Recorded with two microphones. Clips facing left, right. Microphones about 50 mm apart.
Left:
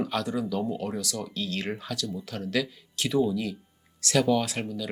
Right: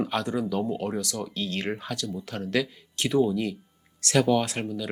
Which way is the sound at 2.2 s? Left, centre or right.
Centre.